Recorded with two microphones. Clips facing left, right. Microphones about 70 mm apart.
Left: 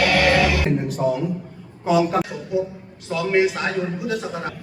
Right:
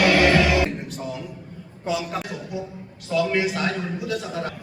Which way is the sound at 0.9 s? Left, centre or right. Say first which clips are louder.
Left 10 dB; left.